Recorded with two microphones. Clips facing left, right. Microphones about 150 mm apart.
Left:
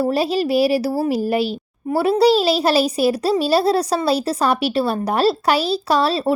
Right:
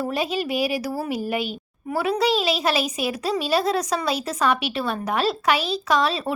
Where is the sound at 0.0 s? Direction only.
35° left (ahead or behind).